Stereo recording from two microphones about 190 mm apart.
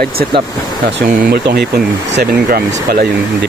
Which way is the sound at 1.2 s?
55° right (ahead or behind).